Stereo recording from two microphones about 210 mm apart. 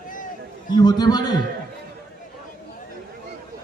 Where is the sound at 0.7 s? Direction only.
20° left (ahead or behind).